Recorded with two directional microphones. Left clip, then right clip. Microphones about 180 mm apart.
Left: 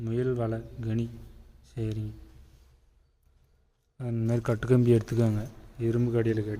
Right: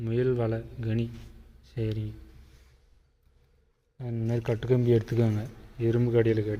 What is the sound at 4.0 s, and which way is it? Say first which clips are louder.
A man's voice: left 2 dB; 25° left (ahead or behind).